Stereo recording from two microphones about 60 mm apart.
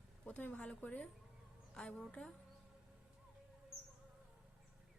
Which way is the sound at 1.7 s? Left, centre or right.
Centre.